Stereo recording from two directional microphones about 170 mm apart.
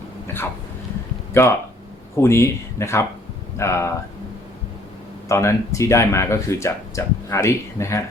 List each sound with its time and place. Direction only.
0.3 s a sound: 15° left (ahead or behind)
1.3 s speech: 15° left (ahead or behind)
5.3 s speech: 15° left (ahead or behind)